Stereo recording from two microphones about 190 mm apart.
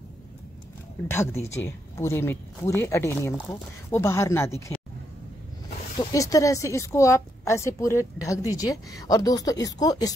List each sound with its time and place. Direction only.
1.0 s speech: 10° left (ahead or behind)
5.9 s speech: 20° left (ahead or behind)